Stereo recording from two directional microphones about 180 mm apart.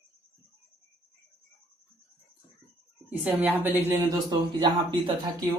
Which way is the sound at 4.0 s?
20° right (ahead or behind).